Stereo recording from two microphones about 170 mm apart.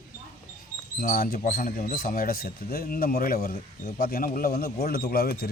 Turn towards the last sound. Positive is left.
turn(degrees=65)  # may be behind; listen again after turning